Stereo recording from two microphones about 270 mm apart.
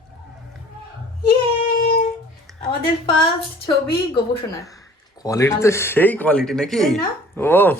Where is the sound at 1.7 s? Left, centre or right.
Left.